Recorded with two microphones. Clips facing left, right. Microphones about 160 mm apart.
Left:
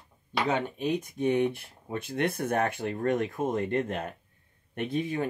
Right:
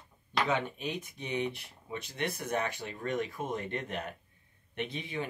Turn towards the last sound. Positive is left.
turn(degrees=45)  # may be behind; listen again after turning